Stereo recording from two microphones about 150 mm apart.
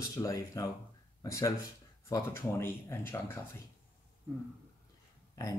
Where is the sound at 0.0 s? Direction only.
20° left (ahead or behind).